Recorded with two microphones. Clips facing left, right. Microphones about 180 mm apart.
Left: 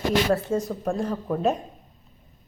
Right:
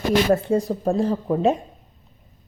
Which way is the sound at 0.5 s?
35° right (ahead or behind).